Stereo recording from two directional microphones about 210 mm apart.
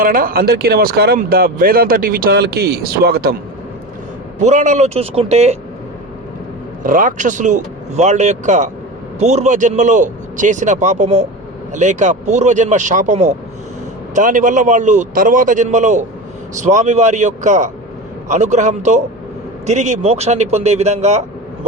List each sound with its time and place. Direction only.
0.0 s speech: 40° right (ahead or behind)
4.4 s a man's voice: 35° right (ahead or behind)
6.8 s a man's voice: 40° right (ahead or behind)